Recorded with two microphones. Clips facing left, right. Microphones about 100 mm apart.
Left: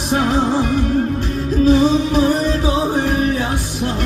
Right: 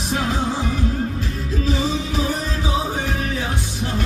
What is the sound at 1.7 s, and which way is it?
Music, 60° left (ahead or behind).